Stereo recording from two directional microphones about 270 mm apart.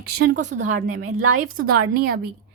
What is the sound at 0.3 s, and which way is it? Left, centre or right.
Speech, right.